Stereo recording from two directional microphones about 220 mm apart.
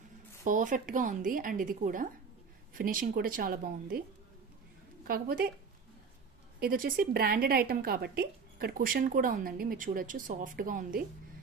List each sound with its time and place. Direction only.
0.4 s a woman's voice: 35° right (ahead or behind)
5.0 s a woman's voice: 40° right (ahead or behind)
6.6 s a woman's voice: 40° right (ahead or behind)